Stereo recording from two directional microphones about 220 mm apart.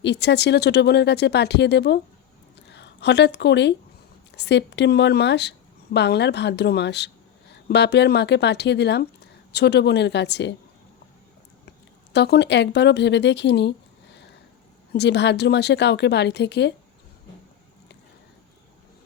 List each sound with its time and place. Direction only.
0.0 s a woman's voice: 50° left (ahead or behind)
12.1 s a woman's voice: 50° left (ahead or behind)
14.9 s a woman's voice: 50° left (ahead or behind)